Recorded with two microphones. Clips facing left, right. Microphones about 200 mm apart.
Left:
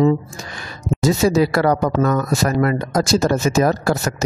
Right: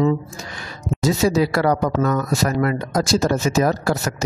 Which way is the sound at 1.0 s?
45° left (ahead or behind).